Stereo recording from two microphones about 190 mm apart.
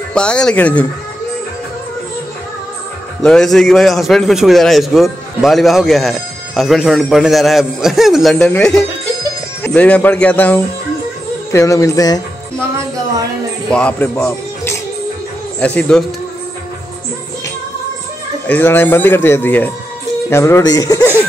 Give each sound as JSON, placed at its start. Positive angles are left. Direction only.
{"t": 0.1, "sound": "a man's voice", "side_deg": 5}
{"t": 3.2, "sound": "a man's voice", "side_deg": 0}
{"t": 13.7, "sound": "a man's voice", "side_deg": 5}
{"t": 18.5, "sound": "a man's voice", "side_deg": 10}